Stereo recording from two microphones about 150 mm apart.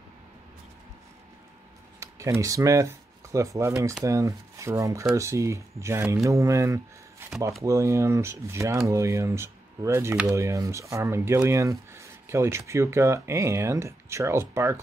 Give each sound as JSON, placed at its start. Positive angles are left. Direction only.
{"t": 2.0, "sound": "speech", "side_deg": -20}